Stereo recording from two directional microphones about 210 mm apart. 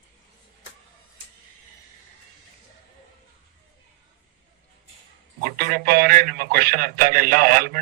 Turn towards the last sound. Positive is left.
turn(degrees=-45)  # may be behind; listen again after turning